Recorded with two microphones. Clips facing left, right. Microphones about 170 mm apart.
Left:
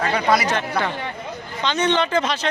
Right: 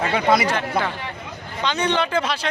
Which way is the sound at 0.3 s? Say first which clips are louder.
Right 1 dB; 25° right (ahead or behind).